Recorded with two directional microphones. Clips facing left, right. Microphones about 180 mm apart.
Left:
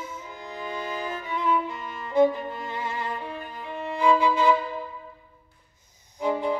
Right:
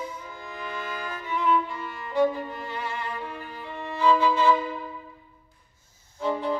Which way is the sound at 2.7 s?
20° left (ahead or behind).